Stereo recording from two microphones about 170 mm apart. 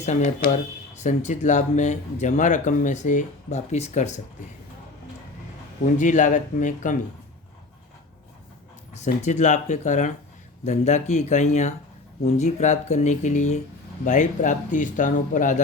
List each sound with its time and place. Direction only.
0.0 s speech: 45° left (ahead or behind)
5.8 s speech: 50° left (ahead or behind)
9.2 s speech: 45° left (ahead or behind)